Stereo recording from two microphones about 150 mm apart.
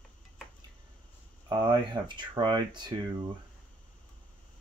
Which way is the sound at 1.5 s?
30° right (ahead or behind).